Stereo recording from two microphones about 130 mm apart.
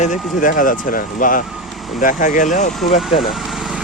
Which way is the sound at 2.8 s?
50° left (ahead or behind).